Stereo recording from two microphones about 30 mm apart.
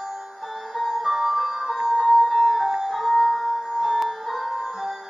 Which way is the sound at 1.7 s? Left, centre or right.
Centre.